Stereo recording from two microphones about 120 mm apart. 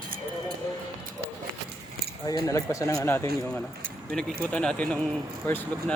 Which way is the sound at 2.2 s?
30° left (ahead or behind).